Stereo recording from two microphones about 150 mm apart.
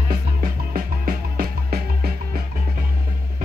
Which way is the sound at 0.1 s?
70° right (ahead or behind).